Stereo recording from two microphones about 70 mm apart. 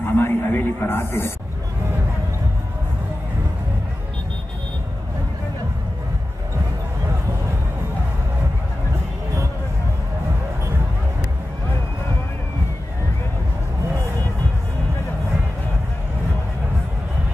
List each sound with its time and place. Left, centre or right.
0.0 s a man's voice: left